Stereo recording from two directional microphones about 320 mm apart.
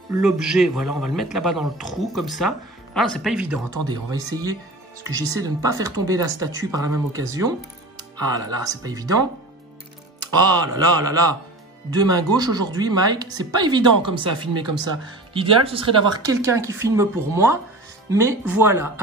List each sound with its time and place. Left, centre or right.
0.2 s a man's voice: centre
10.4 s speech: centre